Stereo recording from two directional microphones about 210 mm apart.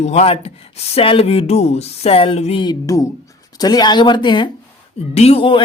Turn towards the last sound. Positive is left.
turn(degrees=25)  # may be behind; listen again after turning